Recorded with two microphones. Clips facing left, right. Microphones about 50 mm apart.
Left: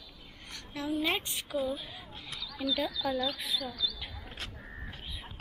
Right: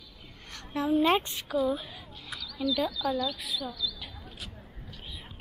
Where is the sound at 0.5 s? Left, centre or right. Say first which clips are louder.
Right 7 dB; right.